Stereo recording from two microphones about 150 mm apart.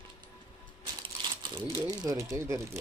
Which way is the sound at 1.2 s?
30° right (ahead or behind).